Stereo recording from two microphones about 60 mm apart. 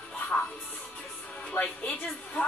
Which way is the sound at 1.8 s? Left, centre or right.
Left.